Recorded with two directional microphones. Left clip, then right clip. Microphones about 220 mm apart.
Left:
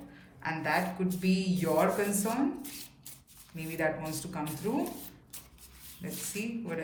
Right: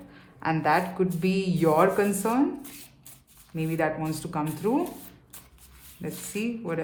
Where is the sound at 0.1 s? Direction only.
20° right (ahead or behind).